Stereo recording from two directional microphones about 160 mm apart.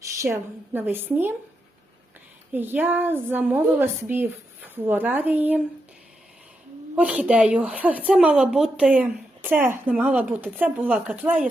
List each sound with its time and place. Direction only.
0.2 s speech: 15° right (ahead or behind)
2.5 s speech: 10° right (ahead or behind)
6.9 s speech: 10° right (ahead or behind)